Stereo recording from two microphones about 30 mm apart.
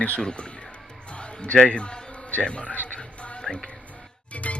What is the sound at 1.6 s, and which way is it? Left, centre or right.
Music, left.